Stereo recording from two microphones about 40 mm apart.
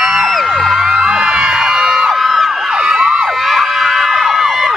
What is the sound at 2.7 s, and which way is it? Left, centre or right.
Emergency vehicle, centre.